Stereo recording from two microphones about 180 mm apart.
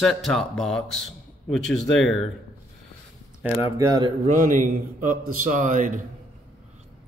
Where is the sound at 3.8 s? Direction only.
25° right (ahead or behind).